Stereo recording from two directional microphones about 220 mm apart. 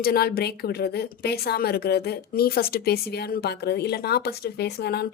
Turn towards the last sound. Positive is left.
turn(degrees=50)  # may be behind; listen again after turning